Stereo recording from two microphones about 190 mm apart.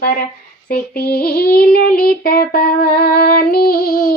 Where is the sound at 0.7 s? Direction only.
55° left (ahead or behind).